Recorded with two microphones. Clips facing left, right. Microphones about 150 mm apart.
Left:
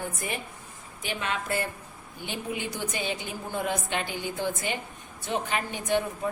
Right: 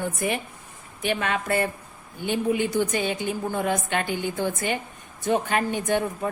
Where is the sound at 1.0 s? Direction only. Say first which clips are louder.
Right 6 dB; 60° right (ahead or behind).